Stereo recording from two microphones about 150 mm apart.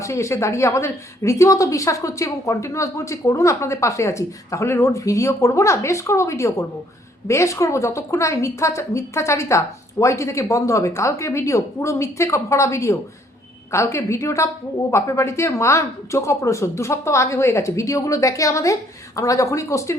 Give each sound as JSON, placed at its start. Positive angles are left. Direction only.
{"t": 0.0, "sound": "a woman's voice", "side_deg": 20}